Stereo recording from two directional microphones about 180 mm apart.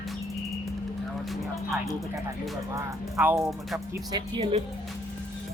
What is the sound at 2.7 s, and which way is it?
Speech, 15° right (ahead or behind).